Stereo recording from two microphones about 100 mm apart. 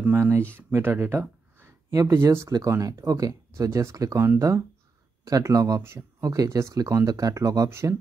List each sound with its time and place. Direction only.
0.1 s speech: 25° right (ahead or behind)
1.9 s speech: 35° right (ahead or behind)